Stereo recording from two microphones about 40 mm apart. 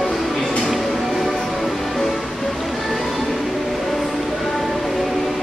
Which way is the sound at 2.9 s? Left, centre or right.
Centre.